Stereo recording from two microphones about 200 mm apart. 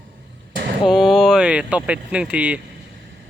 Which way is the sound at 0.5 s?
50° right (ahead or behind).